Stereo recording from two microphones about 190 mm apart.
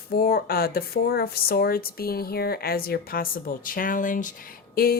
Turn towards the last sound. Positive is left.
turn(degrees=50)  # may be behind; listen again after turning